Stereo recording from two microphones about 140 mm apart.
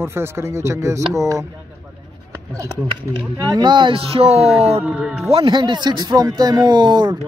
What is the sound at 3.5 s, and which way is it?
Speech, 35° right (ahead or behind).